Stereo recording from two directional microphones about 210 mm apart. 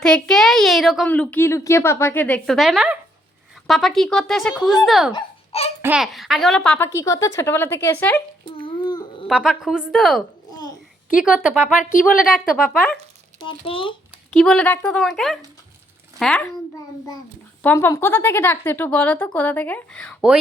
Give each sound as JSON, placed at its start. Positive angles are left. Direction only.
{"t": 0.0, "sound": "a child's voice", "side_deg": 5}
{"t": 5.1, "sound": "speech", "side_deg": 30}
{"t": 5.8, "sound": "a woman's voice", "side_deg": -5}
{"t": 8.4, "sound": "a sound", "side_deg": 25}
{"t": 9.2, "sound": "a woman's voice", "side_deg": 0}
{"t": 10.5, "sound": "babbling", "side_deg": 20}
{"t": 11.8, "sound": "a woman's voice", "side_deg": 40}
{"t": 12.6, "sound": "a woman's voice", "side_deg": 5}
{"t": 13.5, "sound": "speech", "side_deg": 25}
{"t": 14.3, "sound": "a woman's voice", "side_deg": 5}
{"t": 17.6, "sound": "a woman's voice", "side_deg": 10}